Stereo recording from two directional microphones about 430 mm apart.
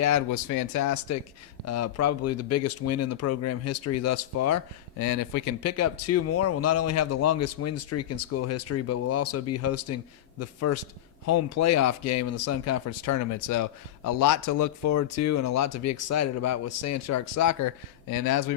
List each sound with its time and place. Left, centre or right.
0.0 s speech: left